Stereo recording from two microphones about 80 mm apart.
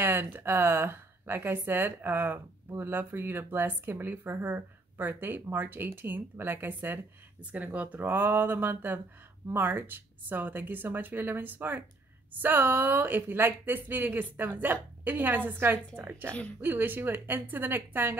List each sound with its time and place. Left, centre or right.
0.0 s a woman's voice: right